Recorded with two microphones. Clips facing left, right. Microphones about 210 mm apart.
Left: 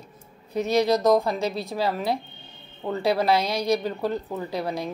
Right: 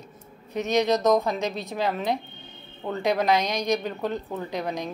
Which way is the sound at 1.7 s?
10° left (ahead or behind).